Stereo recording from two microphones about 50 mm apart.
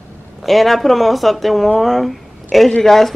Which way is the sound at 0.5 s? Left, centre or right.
Centre.